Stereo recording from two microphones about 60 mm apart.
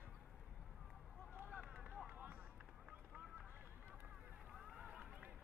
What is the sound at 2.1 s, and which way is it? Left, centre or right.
Run, right.